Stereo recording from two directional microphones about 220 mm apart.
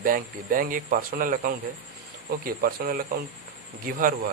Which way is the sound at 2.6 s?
45° right (ahead or behind).